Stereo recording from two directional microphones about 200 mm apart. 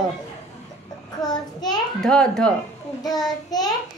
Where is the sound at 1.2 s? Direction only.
20° left (ahead or behind).